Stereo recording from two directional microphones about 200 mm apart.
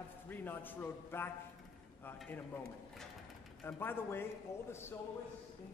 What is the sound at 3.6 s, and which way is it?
A man's voice, 10° left (ahead or behind).